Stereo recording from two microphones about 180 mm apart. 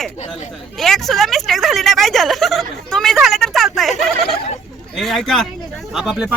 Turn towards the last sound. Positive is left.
turn(degrees=-5)  # may be behind; listen again after turning